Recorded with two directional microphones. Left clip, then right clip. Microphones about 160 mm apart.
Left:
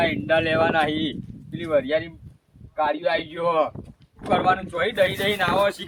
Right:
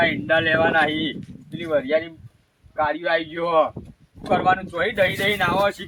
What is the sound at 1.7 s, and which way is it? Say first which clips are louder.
A man's voice: right 1 dB; 25° left (ahead or behind).